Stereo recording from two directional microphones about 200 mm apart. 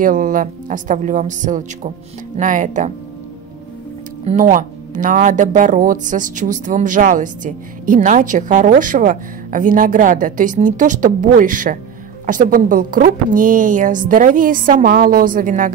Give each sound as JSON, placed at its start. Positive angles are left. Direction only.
{"t": 0.0, "sound": "a woman's voice", "side_deg": -40}
{"t": 4.2, "sound": "a woman's voice", "side_deg": -35}